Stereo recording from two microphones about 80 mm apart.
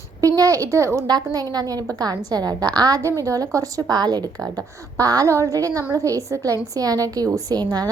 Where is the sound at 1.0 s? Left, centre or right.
Right.